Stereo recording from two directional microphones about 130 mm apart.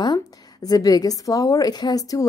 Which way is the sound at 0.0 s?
30° left (ahead or behind).